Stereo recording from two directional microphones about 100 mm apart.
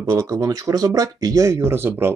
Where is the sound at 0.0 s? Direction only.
35° right (ahead or behind).